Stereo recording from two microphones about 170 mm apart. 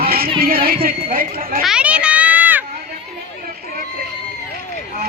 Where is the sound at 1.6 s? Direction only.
5° right (ahead or behind).